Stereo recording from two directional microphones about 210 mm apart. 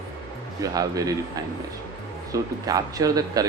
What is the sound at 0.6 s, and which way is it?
Speech, 15° right (ahead or behind).